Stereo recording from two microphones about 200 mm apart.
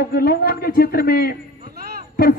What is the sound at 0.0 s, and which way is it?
A man's voice, 50° left (ahead or behind).